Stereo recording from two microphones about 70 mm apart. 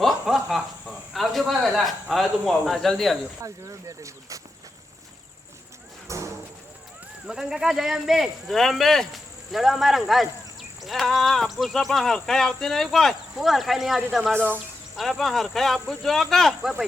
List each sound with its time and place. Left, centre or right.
0.0 s snicker: centre
0.3 s speech: centre
3.4 s speech: right
6.1 s a sound: right
7.3 s speech: centre